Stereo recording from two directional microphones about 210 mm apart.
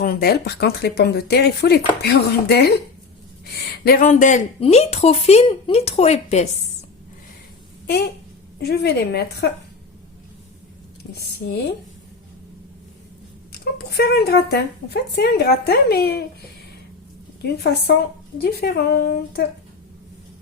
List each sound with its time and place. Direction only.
0.0 s speech: 45° left (ahead or behind)
8.5 s speech: 50° left (ahead or behind)
13.5 s speech: 50° left (ahead or behind)
17.6 s speech: 50° left (ahead or behind)